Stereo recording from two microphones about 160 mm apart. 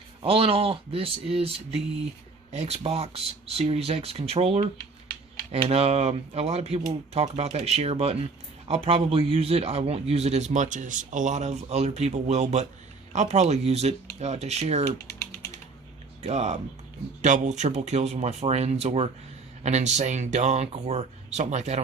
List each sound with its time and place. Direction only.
0.2 s a man's voice: 35° right (ahead or behind)
16.2 s a man's voice: 45° right (ahead or behind)